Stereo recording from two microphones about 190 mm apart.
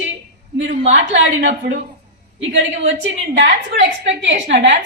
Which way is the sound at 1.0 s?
70° right (ahead or behind).